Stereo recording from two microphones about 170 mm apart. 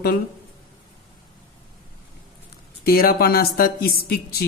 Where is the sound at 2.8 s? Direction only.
60° left (ahead or behind).